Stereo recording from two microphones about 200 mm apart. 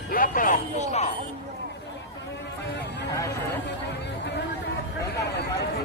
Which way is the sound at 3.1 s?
15° left (ahead or behind).